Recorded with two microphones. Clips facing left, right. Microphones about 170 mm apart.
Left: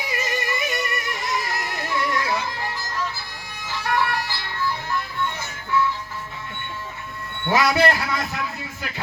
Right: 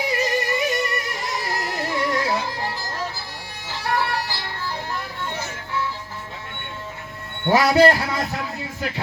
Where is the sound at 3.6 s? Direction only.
35° right (ahead or behind).